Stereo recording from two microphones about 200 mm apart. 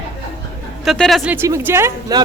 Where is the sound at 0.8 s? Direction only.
Centre (ahead or behind); by 2.2 s 15° right (ahead or behind).